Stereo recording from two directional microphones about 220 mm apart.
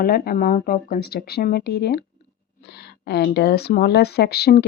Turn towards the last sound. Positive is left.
turn(degrees=45)  # may be behind; listen again after turning